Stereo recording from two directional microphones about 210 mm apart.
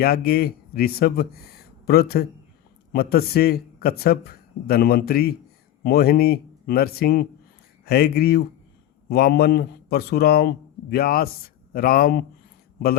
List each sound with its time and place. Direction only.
0.0 s a man's voice: 45° left (ahead or behind)